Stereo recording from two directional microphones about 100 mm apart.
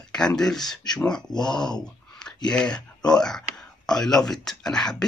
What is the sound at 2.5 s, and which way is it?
Speech, 10° left (ahead or behind).